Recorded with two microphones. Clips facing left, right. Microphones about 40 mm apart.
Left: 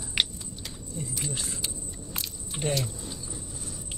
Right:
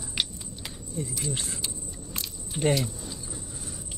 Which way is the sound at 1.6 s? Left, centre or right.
Centre.